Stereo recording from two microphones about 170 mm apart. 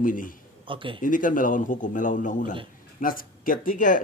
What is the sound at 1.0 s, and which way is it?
Speech, 50° left (ahead or behind).